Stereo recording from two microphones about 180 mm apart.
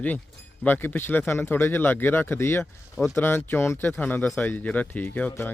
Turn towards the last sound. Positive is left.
turn(degrees=10)  # may be behind; listen again after turning